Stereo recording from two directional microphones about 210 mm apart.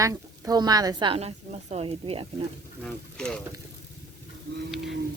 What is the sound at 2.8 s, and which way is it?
Speech, 5° left (ahead or behind).